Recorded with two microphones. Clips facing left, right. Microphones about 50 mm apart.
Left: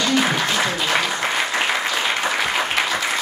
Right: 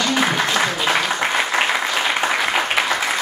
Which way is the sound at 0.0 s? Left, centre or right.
Centre.